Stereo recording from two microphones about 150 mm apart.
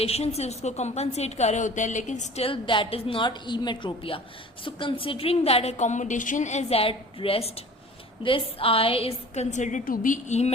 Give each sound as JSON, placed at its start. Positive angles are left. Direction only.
{"t": 0.0, "sound": "a woman's voice", "side_deg": 45}